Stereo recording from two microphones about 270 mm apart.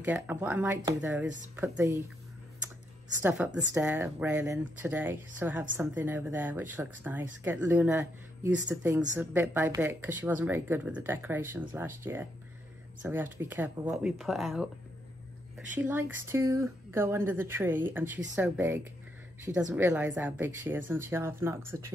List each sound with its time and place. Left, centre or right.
0.0 s a woman's voice: centre
3.2 s a woman's voice: centre
15.7 s a woman's voice: centre